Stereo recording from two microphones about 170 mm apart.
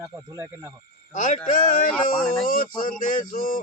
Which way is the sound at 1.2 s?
45° left (ahead or behind).